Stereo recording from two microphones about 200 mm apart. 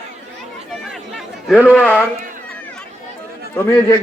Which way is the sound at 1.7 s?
5° left (ahead or behind).